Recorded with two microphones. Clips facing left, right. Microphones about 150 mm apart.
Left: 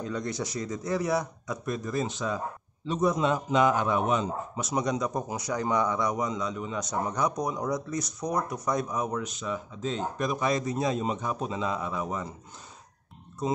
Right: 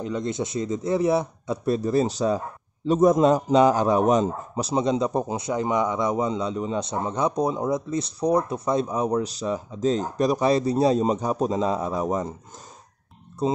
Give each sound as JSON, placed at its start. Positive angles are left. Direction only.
{"t": 0.0, "sound": "a man's voice", "side_deg": -20}
{"t": 13.4, "sound": "a man's voice", "side_deg": -30}